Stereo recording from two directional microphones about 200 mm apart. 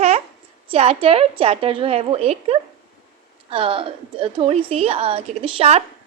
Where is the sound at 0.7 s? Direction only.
30° right (ahead or behind).